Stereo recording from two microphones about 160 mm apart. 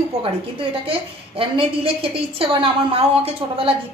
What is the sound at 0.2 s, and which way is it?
A woman's voice, 35° right (ahead or behind).